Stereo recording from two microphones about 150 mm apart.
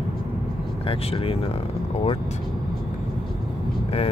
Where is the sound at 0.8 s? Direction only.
35° left (ahead or behind).